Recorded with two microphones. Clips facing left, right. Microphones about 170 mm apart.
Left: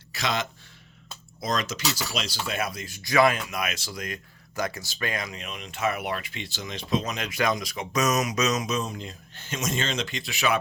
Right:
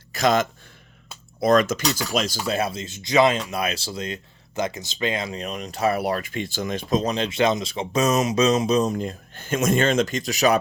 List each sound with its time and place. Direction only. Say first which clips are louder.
0.1 s speech: right 9 dB; 45° right (ahead or behind)
1.8 s speech: right 5 dB; 5° left (ahead or behind)
2.1 s speech: right 8 dB; 45° right (ahead or behind)
2.5 s speech: right 6 dB; 30° right (ahead or behind); by 7.0 s 50° right (ahead or behind)
7.0 s speech: right 6 dB; 30° right (ahead or behind)